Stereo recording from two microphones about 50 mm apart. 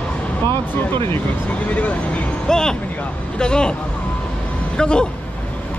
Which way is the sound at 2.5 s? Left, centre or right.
Centre.